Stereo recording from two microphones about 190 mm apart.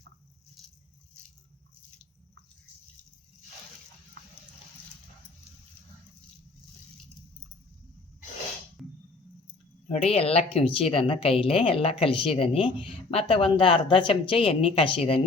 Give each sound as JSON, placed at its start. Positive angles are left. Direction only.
{"t": 9.9, "sound": "a woman's voice", "side_deg": 35}